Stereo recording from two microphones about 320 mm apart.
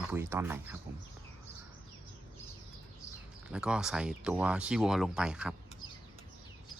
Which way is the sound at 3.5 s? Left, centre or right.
Centre.